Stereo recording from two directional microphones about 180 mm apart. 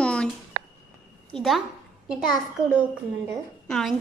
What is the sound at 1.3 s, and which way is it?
Speech, centre (ahead or behind).